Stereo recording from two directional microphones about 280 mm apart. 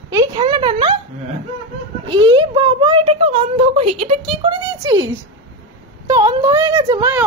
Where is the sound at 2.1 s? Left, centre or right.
Centre.